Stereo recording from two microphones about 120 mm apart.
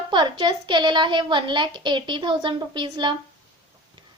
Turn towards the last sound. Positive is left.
turn(degrees=-40)  # may be behind; listen again after turning